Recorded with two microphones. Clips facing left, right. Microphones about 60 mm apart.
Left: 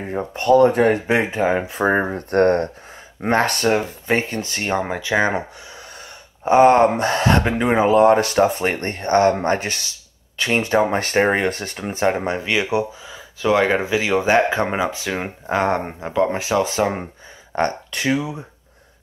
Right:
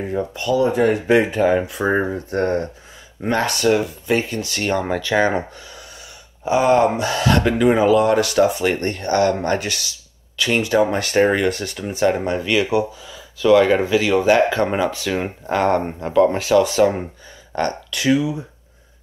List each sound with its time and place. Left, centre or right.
0.1 s speech: left
1.0 s speech: left
3.2 s speech: left
4.6 s speech: left
6.4 s speech: left